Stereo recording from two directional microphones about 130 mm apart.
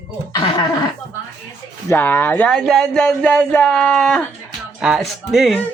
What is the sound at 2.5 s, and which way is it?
Speech, 5° left (ahead or behind).